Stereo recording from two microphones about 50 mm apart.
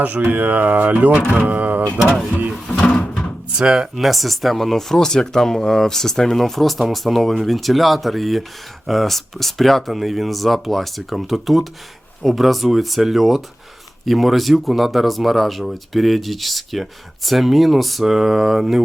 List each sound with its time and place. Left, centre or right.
0.3 s speech: right
2.8 s drawer open or close: centre
3.6 s speech: centre